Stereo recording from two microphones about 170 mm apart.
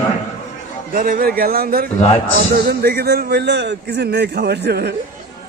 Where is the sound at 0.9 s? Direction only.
60° right (ahead or behind).